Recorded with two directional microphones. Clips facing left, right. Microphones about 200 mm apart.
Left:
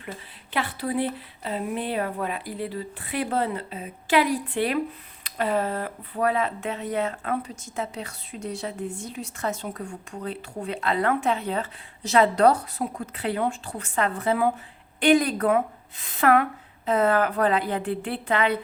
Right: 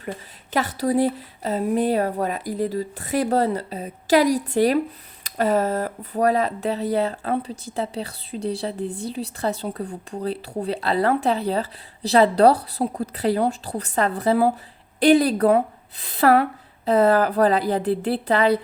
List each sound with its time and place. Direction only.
0.5 s speech: 40° right (ahead or behind)